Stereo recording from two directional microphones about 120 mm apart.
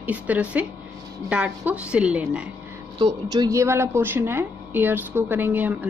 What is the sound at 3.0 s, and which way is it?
A woman's voice, 35° right (ahead or behind).